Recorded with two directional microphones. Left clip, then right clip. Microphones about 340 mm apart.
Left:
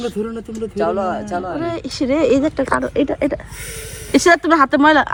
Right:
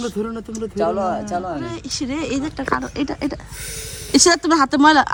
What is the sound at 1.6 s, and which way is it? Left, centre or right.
Speech, centre.